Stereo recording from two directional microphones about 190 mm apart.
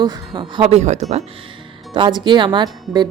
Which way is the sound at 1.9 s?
25° right (ahead or behind).